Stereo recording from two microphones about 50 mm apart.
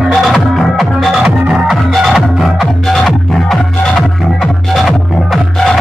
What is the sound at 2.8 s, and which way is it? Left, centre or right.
Music, centre.